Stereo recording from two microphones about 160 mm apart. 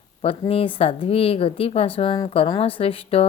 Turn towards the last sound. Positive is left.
turn(degrees=35)  # may be behind; listen again after turning